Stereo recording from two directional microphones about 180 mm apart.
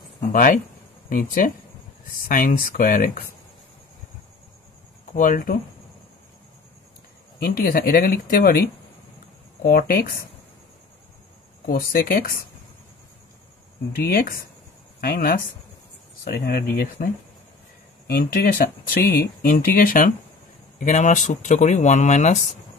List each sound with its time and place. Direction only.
0.2 s speech: 50° left (ahead or behind)
5.1 s speech: 45° left (ahead or behind)
7.3 s speech: 60° left (ahead or behind)
11.6 s speech: 55° left (ahead or behind)
13.9 s speech: 55° left (ahead or behind); by 22.4 s 40° left (ahead or behind)